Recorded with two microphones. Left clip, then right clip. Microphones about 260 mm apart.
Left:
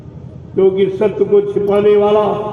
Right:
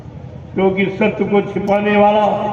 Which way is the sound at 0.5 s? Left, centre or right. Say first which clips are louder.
Left 4 dB; right.